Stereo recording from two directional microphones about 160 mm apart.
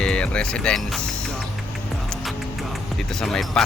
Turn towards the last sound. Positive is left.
turn(degrees=5)  # may be behind; listen again after turning